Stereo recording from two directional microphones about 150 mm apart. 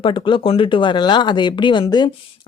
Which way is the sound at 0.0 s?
35° left (ahead or behind).